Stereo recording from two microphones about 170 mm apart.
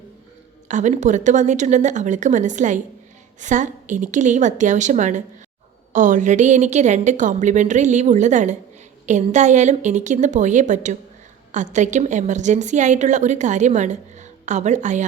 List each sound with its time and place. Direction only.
0.7 s a woman's voice: 45° right (ahead or behind)